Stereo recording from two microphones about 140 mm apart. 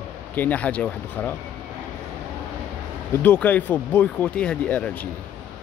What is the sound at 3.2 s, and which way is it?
Speech, 10° left (ahead or behind).